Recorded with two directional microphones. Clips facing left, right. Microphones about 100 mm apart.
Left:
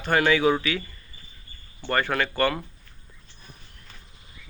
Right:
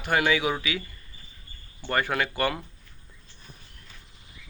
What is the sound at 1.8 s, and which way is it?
Speech, 15° right (ahead or behind).